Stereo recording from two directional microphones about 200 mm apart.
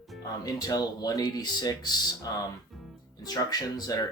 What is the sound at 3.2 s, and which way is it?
Speech, 20° left (ahead or behind).